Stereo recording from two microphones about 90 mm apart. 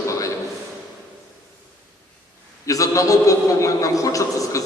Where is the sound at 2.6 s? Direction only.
40° left (ahead or behind).